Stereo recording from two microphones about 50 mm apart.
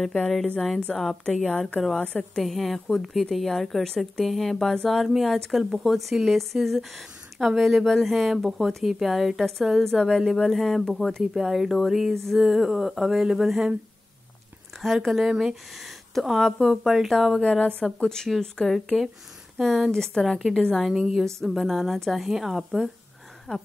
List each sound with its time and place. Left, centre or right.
0.9 s speech: centre
1.2 s speech: centre
11.3 s speech: centre
12.4 s a sound: centre
14.8 s speech: centre
16.7 s speech: centre
17.4 s a woman's voice: left; by 20.6 s centre
20.9 s a sound: centre
21.5 s speech: centre
23.5 s speech: centre